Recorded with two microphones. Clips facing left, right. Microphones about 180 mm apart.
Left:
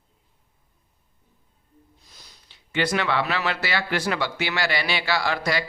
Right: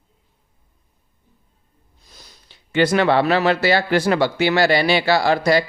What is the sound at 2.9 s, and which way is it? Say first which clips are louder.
Speech: right 10 dB; 35° right (ahead or behind).